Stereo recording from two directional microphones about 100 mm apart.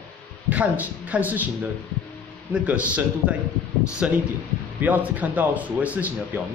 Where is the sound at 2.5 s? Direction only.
15° right (ahead or behind).